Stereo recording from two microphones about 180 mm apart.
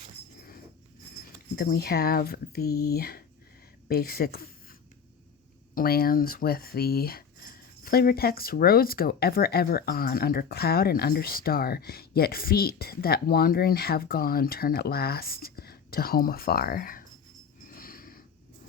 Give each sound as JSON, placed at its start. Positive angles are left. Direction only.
{"t": 1.5, "sound": "speech", "side_deg": 60}
{"t": 5.7, "sound": "speech", "side_deg": 55}
{"t": 17.7, "sound": "a sound", "side_deg": 50}